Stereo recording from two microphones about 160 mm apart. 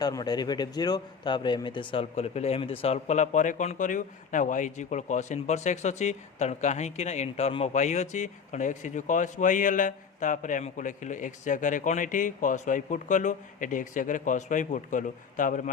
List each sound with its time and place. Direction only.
0.0 s speech: 25° left (ahead or behind); by 15.7 s 55° left (ahead or behind)